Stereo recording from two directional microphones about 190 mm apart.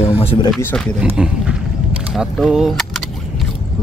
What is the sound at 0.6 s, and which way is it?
Speech, 10° left (ahead or behind).